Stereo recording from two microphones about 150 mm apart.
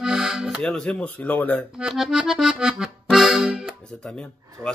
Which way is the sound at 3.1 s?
Centre (ahead or behind).